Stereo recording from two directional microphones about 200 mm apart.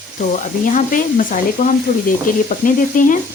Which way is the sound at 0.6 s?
40° left (ahead or behind).